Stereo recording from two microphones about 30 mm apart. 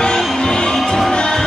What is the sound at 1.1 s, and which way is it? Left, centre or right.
Music, left.